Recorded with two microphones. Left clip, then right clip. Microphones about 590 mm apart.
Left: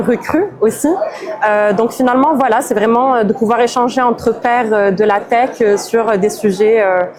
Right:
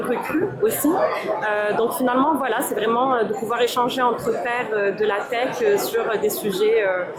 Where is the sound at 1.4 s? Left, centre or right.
Left.